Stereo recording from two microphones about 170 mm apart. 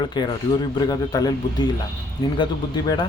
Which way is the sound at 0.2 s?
25° left (ahead or behind).